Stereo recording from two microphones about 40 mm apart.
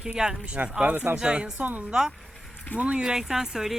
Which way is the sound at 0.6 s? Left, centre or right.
Right.